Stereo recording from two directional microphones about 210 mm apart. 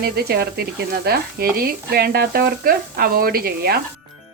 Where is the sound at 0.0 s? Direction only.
45° right (ahead or behind).